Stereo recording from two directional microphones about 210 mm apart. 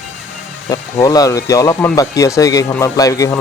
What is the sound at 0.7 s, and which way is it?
Speech, 15° left (ahead or behind).